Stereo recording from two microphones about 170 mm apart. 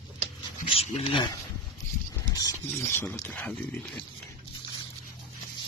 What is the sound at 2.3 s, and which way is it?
Speech, 20° left (ahead or behind).